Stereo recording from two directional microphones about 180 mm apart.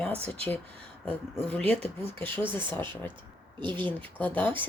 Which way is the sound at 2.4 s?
25° right (ahead or behind).